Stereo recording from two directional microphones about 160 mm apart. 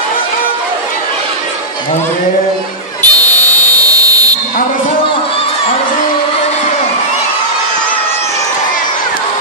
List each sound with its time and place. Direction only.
3.0 s buzzer: 10° left (ahead or behind)
3.8 s buzzer: 20° right (ahead or behind)